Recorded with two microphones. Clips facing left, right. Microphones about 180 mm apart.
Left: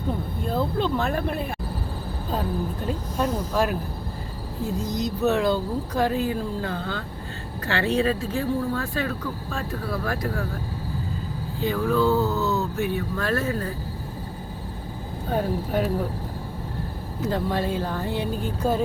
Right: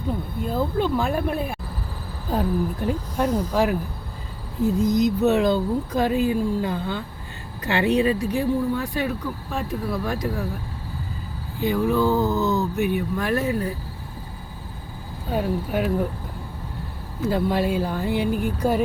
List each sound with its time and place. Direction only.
0.4 s speech: 10° right (ahead or behind)
2.8 s speech: 10° right (ahead or behind)
11.6 s speech: 15° right (ahead or behind)
15.3 s speech: 10° right (ahead or behind)
17.2 s speech: 10° right (ahead or behind)